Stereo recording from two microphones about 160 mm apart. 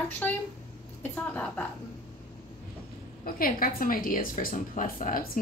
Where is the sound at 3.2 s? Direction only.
65° left (ahead or behind).